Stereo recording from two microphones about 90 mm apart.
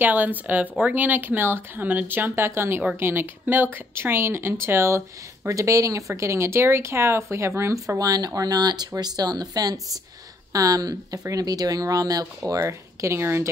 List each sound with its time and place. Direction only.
0.0 s speech: 20° right (ahead or behind)